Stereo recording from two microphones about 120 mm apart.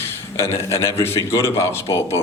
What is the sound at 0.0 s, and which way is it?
A man's voice, 20° left (ahead or behind).